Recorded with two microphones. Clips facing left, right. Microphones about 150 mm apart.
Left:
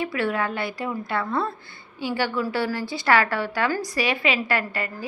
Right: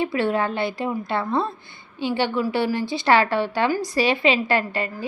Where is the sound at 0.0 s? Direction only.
25° right (ahead or behind).